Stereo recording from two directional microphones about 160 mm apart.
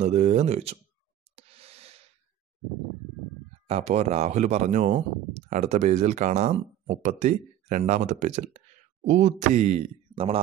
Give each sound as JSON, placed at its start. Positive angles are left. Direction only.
{"t": 0.0, "sound": "speech", "side_deg": -45}
{"t": 1.3, "sound": "a sound", "side_deg": -40}
{"t": 3.6, "sound": "speech", "side_deg": -40}